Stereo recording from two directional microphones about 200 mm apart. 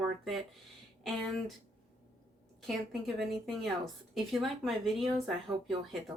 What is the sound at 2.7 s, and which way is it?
A woman's voice, centre (ahead or behind).